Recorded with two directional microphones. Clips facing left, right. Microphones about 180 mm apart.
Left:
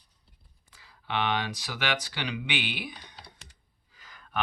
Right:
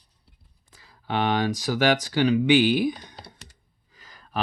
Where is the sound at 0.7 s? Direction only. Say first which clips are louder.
Right 5 dB; 40° right (ahead or behind).